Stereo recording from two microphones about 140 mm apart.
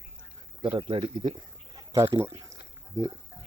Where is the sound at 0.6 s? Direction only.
35° right (ahead or behind).